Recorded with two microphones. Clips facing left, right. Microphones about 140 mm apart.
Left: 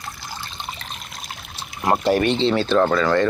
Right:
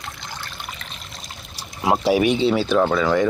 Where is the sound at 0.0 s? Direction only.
5° left (ahead or behind).